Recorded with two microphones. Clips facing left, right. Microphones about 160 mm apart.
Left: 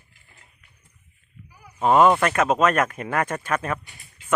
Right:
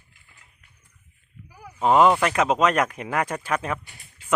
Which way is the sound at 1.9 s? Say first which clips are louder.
Left 1 dB; 10° right (ahead or behind).